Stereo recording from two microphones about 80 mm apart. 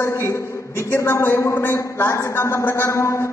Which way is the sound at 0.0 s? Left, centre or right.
Left.